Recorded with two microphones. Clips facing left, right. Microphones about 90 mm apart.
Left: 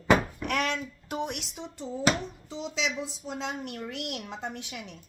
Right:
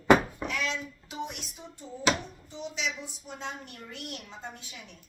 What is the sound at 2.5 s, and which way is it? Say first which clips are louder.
A woman's voice: left 3 dB; 90° left.